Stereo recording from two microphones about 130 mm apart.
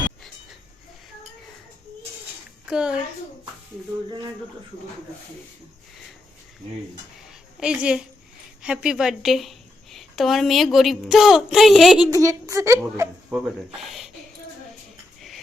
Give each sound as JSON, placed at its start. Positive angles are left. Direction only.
{"t": 2.6, "sound": "a child's voice", "side_deg": -5}
{"t": 7.6, "sound": "a woman's voice", "side_deg": -5}
{"t": 12.1, "sound": "a woman's voice", "side_deg": -25}
{"t": 13.3, "sound": "speech", "side_deg": 0}